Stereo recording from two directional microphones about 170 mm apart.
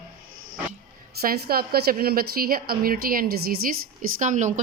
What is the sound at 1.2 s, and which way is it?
A woman's voice, 60° right (ahead or behind).